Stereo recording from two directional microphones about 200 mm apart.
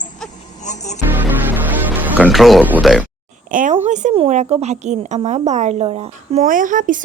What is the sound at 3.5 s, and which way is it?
A woman's voice, 40° right (ahead or behind).